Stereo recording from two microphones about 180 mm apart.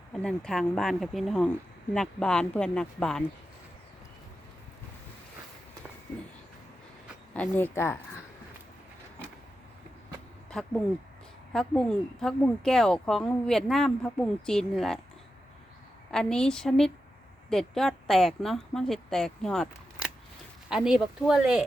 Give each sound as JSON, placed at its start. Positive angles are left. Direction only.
{"t": 0.1, "sound": "speech", "side_deg": 5}
{"t": 7.3, "sound": "a woman's voice", "side_deg": 10}
{"t": 10.5, "sound": "speech", "side_deg": 5}
{"t": 16.1, "sound": "speech", "side_deg": 5}
{"t": 20.7, "sound": "speech", "side_deg": -5}